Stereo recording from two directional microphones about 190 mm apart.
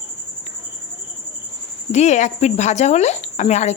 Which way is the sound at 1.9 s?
35° left (ahead or behind).